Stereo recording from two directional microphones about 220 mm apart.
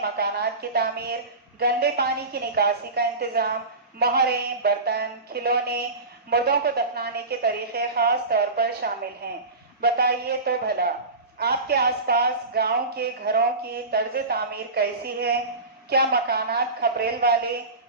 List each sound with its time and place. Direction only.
0.0 s a woman's voice: 45° right (ahead or behind)